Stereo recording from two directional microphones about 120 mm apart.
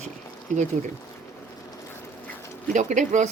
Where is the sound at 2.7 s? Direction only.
90° right.